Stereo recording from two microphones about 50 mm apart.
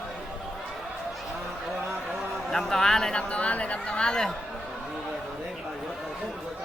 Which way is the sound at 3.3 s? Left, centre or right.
Left.